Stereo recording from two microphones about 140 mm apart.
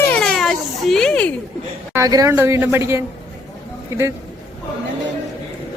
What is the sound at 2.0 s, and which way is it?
A woman's voice, 25° right (ahead or behind).